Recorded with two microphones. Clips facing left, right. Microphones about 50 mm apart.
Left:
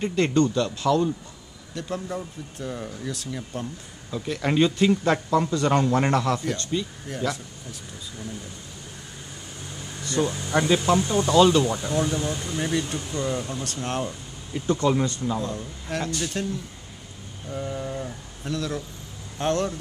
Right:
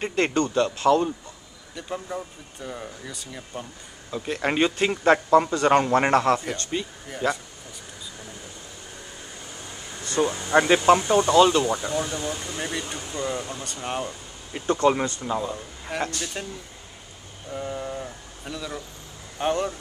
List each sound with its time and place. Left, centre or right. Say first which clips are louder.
0.0 s a man's voice: left 2 dB; right
1.8 s speech: left 1 dB; centre
4.1 s a man's voice: even; right
7.1 s speech: right 3 dB; centre
10.2 s a man's voice: right 4 dB; right
11.2 s speech: left 1 dB; centre
14.8 s a man's voice: right 3 dB; right
15.1 s speech: even; centre